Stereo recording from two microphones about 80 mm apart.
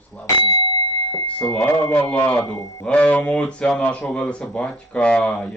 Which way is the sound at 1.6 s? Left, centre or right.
Left.